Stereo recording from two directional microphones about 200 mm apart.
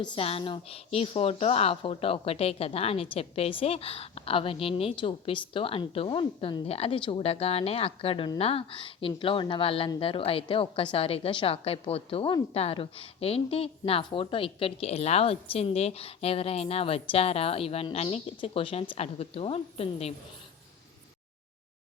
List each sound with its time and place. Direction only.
0.0 s speech: 25° left (ahead or behind)